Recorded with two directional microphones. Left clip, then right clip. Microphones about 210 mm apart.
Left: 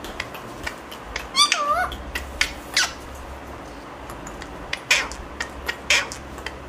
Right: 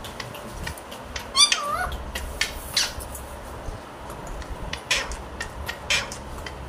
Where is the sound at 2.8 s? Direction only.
25° left (ahead or behind).